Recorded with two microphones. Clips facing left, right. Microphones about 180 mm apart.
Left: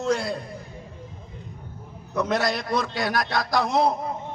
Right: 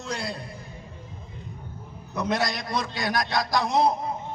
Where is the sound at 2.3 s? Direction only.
15° right (ahead or behind).